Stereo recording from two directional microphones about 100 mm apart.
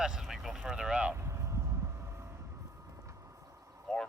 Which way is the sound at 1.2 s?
30° right (ahead or behind).